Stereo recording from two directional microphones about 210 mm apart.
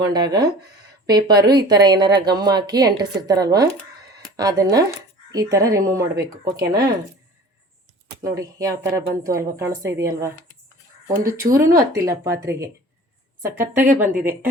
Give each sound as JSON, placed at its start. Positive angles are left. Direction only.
{"t": 0.0, "sound": "speech", "side_deg": -20}
{"t": 8.2, "sound": "speech", "side_deg": -15}